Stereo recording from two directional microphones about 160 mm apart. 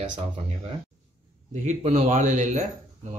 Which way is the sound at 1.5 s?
45° right (ahead or behind).